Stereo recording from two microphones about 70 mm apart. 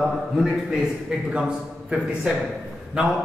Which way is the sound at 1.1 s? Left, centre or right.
Centre.